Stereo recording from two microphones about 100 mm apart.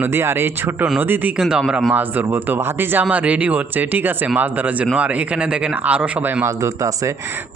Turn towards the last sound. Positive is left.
turn(degrees=-30)  # may be behind; listen again after turning